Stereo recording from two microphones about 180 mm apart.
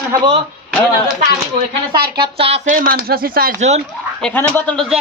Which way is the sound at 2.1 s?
30° right (ahead or behind).